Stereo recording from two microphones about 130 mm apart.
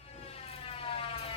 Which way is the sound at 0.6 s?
45° left (ahead or behind).